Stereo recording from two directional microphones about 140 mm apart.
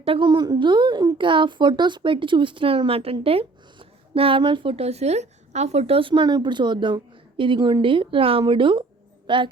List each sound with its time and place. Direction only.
0.0 s a woman's voice: 40° right (ahead or behind)